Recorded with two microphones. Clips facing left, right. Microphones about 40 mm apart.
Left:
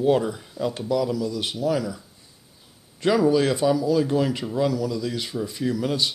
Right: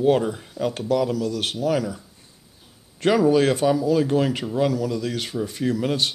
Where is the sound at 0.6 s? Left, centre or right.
Right.